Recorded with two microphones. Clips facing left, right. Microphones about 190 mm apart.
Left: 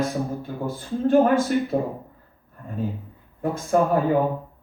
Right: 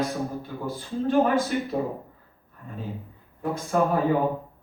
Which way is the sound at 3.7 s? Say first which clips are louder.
Left 3 dB; 50° left (ahead or behind).